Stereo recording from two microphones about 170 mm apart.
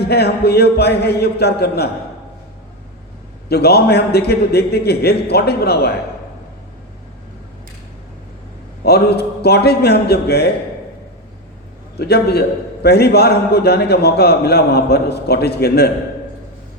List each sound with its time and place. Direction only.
0.0 s a man's voice: 70° left (ahead or behind)
3.5 s a man's voice: 70° left (ahead or behind)
8.8 s a man's voice: 70° left (ahead or behind)
11.9 s a man's voice: 70° left (ahead or behind)